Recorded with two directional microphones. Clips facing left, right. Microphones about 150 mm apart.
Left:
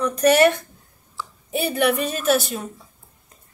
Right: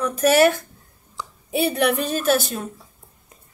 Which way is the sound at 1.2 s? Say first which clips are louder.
Even; 15° right (ahead or behind).